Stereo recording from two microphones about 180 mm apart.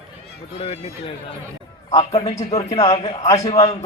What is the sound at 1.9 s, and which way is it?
A man's voice, 35° left (ahead or behind).